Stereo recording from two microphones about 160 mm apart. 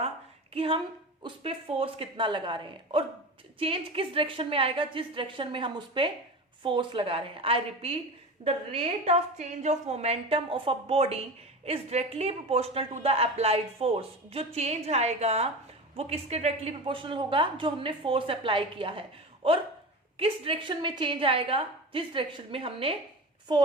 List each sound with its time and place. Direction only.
0.5 s speech: 35° right (ahead or behind)
20.1 s speech: 35° right (ahead or behind)